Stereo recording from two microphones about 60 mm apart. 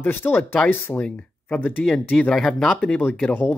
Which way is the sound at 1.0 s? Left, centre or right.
Left.